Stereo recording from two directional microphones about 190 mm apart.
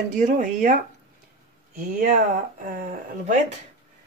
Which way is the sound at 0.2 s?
40° right (ahead or behind).